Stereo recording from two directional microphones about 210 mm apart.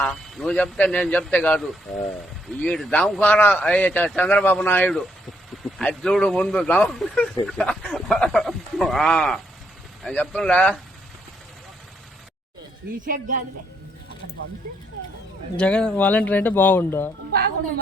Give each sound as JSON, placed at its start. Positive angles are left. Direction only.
{"t": 0.0, "sound": "a man's voice", "side_deg": 0}
{"t": 13.1, "sound": "speech", "side_deg": -40}
{"t": 15.5, "sound": "a man's voice", "side_deg": 5}